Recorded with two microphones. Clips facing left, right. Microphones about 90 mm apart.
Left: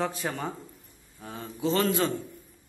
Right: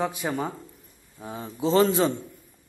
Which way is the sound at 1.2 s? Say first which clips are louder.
Right 2 dB; 20° right (ahead or behind).